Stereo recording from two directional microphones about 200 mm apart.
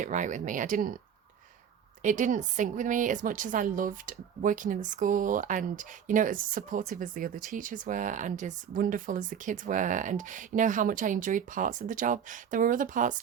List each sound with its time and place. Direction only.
0.0 s a woman's voice: 40° right (ahead or behind)
2.0 s a woman's voice: 40° right (ahead or behind)